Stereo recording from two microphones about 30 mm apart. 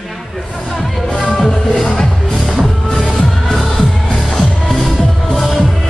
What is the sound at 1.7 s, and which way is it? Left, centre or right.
Music, centre.